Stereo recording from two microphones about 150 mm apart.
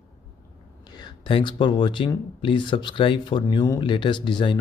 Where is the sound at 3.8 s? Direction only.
35° left (ahead or behind).